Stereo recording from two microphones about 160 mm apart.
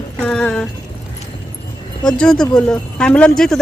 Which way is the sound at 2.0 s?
5° left (ahead or behind).